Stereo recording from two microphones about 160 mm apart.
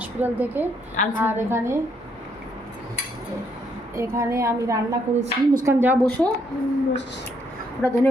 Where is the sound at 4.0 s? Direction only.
15° right (ahead or behind).